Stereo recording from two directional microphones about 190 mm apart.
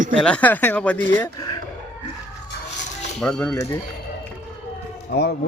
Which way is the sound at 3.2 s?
5° left (ahead or behind).